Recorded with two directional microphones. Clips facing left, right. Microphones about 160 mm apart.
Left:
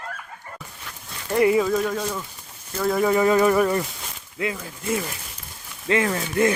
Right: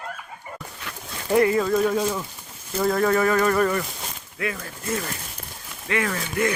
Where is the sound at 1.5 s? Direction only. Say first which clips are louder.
Right 1 dB; centre (ahead or behind).